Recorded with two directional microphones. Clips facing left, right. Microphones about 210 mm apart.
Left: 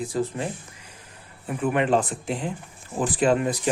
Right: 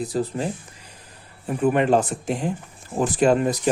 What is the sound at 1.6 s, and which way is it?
Speech, 40° right (ahead or behind).